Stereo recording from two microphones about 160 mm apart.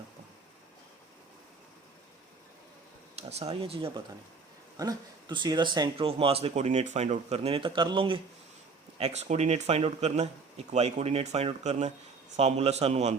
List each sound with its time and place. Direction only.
3.2 s speech: 40° right (ahead or behind)